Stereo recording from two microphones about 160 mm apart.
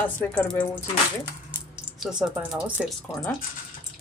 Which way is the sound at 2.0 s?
5° right (ahead or behind).